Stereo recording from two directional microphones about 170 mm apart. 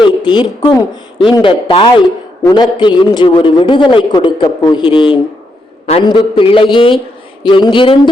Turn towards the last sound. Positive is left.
turn(degrees=30)  # may be behind; listen again after turning